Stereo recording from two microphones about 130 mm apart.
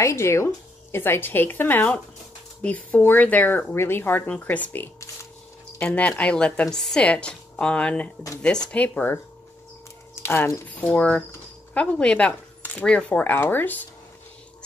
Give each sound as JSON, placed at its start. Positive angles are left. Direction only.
{"t": 0.0, "sound": "speech", "side_deg": 20}